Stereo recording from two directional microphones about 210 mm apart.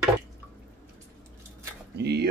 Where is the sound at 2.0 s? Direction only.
55° right (ahead or behind).